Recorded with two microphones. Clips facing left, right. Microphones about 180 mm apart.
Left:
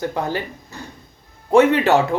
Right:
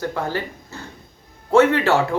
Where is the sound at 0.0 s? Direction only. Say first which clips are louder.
Left 1 dB; 15° left (ahead or behind).